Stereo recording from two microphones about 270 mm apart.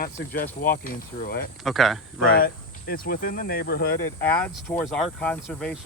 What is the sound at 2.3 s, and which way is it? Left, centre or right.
Speech, left.